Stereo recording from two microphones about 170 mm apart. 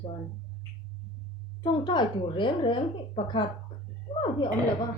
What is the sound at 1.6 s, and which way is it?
A woman's voice, 25° left (ahead or behind).